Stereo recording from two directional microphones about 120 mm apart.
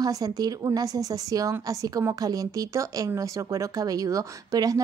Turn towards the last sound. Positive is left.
turn(degrees=-30)  # may be behind; listen again after turning